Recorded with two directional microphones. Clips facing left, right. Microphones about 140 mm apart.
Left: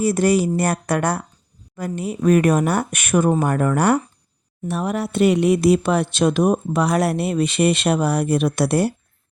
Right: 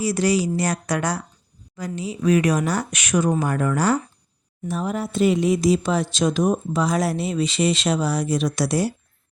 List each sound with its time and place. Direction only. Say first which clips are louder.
0.0 s speech: left 3 dB; 50° left (ahead or behind)